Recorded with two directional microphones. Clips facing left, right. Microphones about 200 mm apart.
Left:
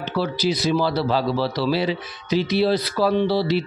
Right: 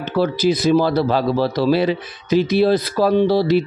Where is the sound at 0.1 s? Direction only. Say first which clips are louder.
Right 6 dB; 50° right (ahead or behind).